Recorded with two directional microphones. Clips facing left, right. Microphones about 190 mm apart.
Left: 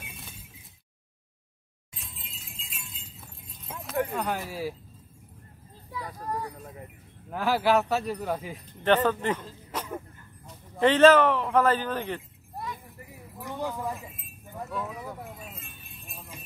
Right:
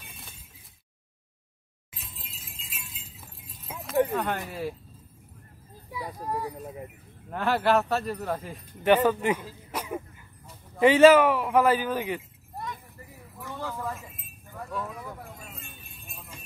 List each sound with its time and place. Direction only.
0.1 s a sound: centre (ahead or behind)
1.9 s a sound: centre (ahead or behind)
4.1 s speech: centre (ahead or behind)
5.9 s speech: 10° right (ahead or behind)
7.2 s speech: 5° left (ahead or behind)
8.8 s speech: 10° right (ahead or behind)
13.4 s a sound: 15° left (ahead or behind)
13.9 s chink: centre (ahead or behind)
14.7 s keys jangling: centre (ahead or behind)